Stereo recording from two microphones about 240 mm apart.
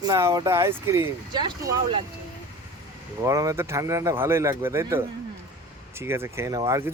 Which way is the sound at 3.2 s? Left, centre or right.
Centre.